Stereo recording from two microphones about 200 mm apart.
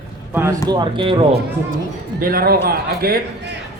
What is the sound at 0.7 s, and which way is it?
Speech, 20° right (ahead or behind).